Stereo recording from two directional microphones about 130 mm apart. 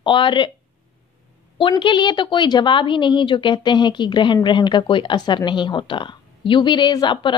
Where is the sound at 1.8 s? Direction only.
35° left (ahead or behind).